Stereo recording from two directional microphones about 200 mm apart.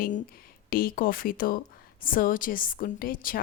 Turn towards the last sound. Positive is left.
turn(degrees=45)  # may be behind; listen again after turning